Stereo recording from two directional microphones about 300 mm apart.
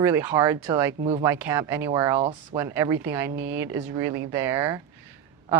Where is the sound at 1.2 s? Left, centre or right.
Centre.